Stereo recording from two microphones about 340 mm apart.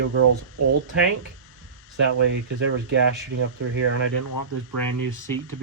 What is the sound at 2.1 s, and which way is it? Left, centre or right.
Speech, right.